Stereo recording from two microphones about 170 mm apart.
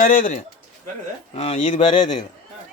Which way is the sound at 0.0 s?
50° left (ahead or behind).